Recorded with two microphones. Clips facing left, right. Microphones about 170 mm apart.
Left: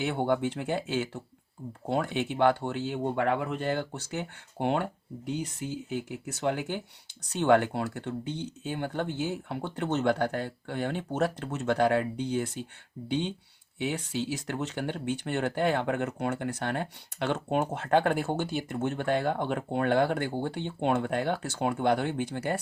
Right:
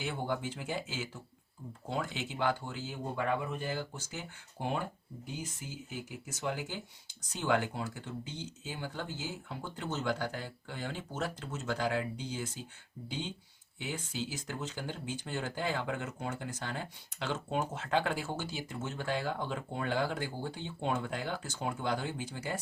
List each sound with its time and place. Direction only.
0.0 s speech: 65° left (ahead or behind)